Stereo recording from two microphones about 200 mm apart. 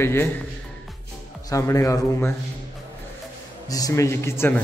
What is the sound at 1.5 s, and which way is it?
Speech, 15° left (ahead or behind).